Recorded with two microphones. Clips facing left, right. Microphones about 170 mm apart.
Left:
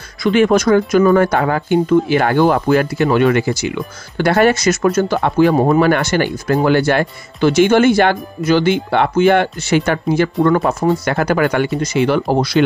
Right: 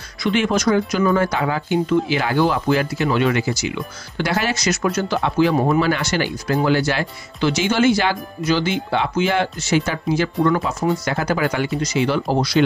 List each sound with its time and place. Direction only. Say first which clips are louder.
0.2 s speech: left 6 dB; 50° left (ahead or behind)